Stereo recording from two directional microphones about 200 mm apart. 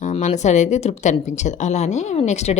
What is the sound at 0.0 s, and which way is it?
Speech, 35° left (ahead or behind).